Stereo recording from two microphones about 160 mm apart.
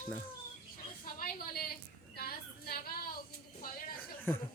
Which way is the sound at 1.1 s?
65° left (ahead or behind).